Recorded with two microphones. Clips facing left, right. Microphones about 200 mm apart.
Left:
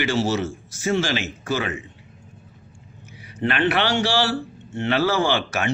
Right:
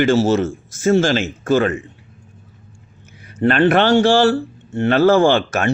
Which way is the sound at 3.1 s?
50° right (ahead or behind).